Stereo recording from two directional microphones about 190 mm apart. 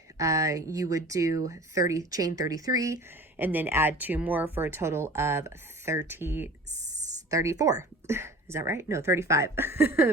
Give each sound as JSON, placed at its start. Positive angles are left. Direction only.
{"t": 0.2, "sound": "speech", "side_deg": -15}
{"t": 6.7, "sound": "a sound", "side_deg": -40}
{"t": 7.3, "sound": "speech", "side_deg": -15}